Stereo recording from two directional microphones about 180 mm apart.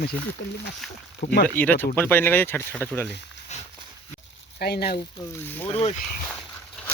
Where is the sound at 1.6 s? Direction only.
10° left (ahead or behind).